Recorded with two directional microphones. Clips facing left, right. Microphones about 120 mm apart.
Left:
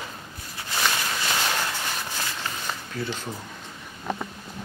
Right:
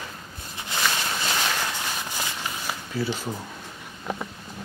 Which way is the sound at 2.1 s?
10° right (ahead or behind).